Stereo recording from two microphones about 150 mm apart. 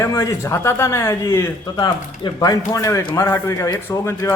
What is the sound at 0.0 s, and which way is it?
A man's voice, 20° left (ahead or behind).